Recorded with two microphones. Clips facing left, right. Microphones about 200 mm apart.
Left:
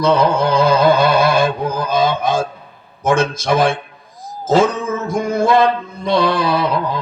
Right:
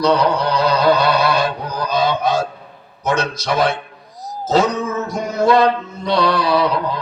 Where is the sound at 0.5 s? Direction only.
50° left (ahead or behind).